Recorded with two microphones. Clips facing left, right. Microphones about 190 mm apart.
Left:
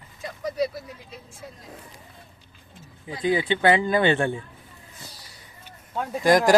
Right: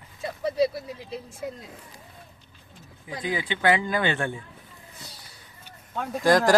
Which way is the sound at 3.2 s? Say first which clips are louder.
Left 4 dB; 30° left (ahead or behind).